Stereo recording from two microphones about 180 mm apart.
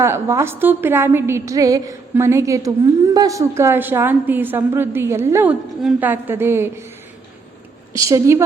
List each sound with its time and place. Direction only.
0.0 s a woman's voice: 15° right (ahead or behind)
7.9 s a woman's voice: 15° right (ahead or behind)